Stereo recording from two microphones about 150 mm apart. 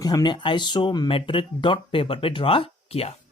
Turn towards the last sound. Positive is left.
turn(degrees=40)  # may be behind; listen again after turning